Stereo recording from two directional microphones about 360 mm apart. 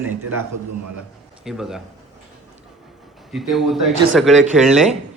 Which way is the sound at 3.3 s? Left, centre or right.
Centre.